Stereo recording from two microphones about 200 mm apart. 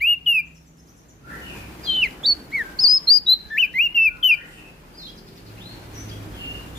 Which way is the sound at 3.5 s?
80° left.